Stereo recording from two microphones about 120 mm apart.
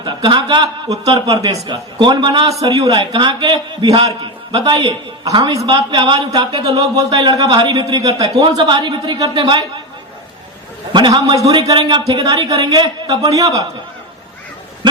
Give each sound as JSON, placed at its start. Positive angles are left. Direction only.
{"t": 0.0, "sound": "a man's voice", "side_deg": -40}
{"t": 2.5, "sound": "a man's voice", "side_deg": -30}
{"t": 3.1, "sound": "a man's voice", "side_deg": -40}
{"t": 10.9, "sound": "a man's voice", "side_deg": -40}